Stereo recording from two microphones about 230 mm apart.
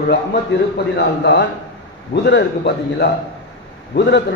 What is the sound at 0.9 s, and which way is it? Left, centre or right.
Speech, left.